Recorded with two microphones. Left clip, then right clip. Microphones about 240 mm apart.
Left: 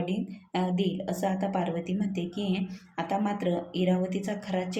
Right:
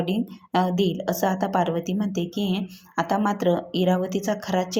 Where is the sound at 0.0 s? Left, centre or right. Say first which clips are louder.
Right 6 dB; right.